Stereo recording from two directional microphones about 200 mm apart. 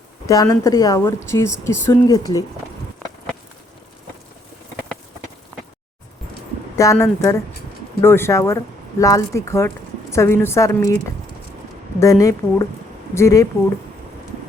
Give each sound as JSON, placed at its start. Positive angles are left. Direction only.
{"t": 0.3, "sound": "speech", "side_deg": 15}
{"t": 6.7, "sound": "speech", "side_deg": 15}